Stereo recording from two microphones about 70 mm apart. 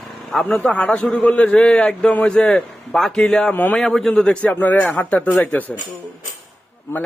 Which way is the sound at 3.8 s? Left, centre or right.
Centre.